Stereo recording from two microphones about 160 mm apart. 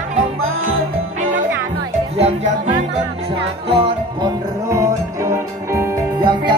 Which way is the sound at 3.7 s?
35° right (ahead or behind).